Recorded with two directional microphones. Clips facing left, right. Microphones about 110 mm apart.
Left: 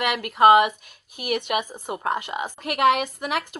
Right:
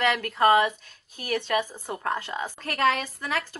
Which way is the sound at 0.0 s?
15° left (ahead or behind).